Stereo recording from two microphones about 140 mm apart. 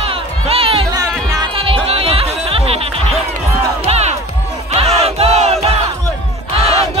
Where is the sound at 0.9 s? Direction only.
25° right (ahead or behind).